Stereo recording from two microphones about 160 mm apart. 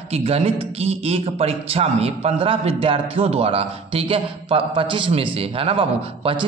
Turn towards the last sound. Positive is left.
turn(degrees=-30)  # may be behind; listen again after turning